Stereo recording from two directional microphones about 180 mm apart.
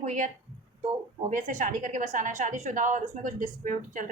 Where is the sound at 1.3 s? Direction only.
40° right (ahead or behind).